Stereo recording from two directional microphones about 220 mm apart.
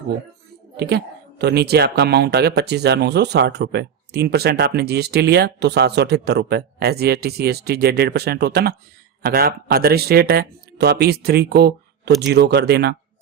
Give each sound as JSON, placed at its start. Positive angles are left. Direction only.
{"t": 0.8, "sound": "speech", "side_deg": -50}